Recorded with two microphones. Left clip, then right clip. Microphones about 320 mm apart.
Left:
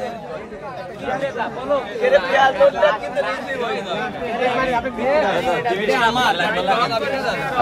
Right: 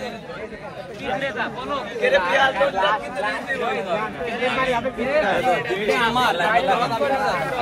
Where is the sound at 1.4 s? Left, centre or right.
Left.